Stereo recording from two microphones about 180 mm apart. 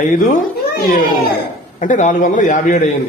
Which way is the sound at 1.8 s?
45° left (ahead or behind).